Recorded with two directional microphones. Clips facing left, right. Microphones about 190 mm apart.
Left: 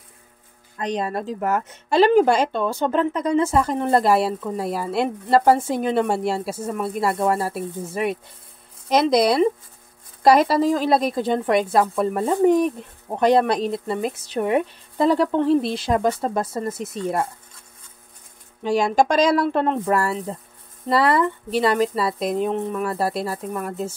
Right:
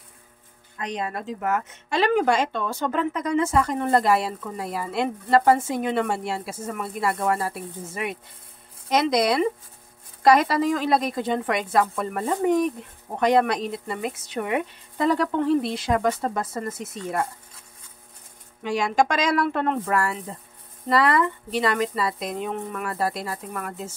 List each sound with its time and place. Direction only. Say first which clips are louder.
0.7 s speech: left 5 dB; 35° left (ahead or behind)
18.6 s speech: left 4 dB; 35° left (ahead or behind)